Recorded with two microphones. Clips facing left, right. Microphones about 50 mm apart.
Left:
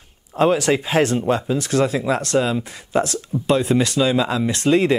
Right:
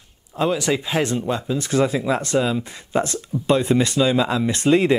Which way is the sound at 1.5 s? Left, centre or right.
Centre.